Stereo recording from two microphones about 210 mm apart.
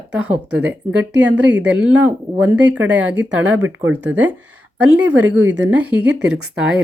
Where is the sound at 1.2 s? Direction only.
5° right (ahead or behind).